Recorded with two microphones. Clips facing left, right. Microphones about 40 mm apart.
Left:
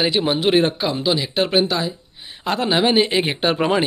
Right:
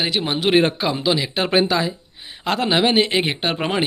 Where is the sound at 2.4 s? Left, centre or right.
Right.